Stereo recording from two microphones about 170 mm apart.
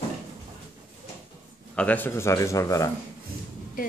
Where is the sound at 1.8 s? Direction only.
10° left (ahead or behind).